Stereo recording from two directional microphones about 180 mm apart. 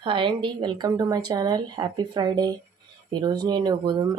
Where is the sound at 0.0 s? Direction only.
30° right (ahead or behind).